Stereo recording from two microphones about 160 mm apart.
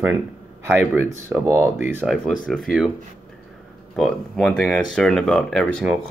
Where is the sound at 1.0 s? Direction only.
15° right (ahead or behind).